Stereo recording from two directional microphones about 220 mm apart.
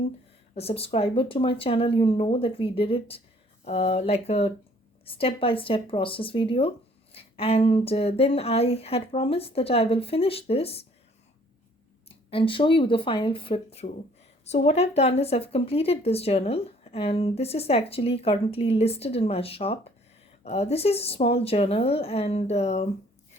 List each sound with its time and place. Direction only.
0.5 s speech: 25° left (ahead or behind)
12.0 s speech: 25° left (ahead or behind)